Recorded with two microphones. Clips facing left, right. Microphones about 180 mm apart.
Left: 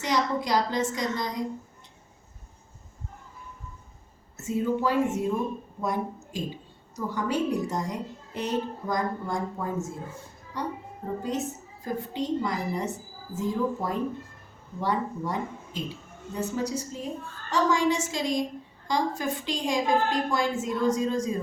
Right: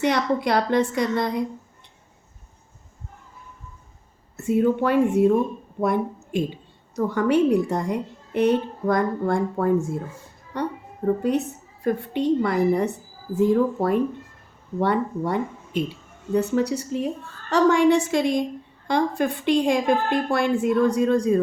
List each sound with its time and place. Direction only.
0.0 s a woman's voice: 60° right (ahead or behind)
4.4 s a woman's voice: 60° right (ahead or behind)